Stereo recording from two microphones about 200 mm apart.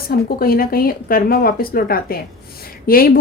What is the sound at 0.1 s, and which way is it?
A woman's voice, 50° left (ahead or behind).